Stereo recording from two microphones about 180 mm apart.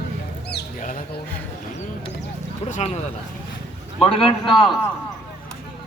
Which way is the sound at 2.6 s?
40° left (ahead or behind).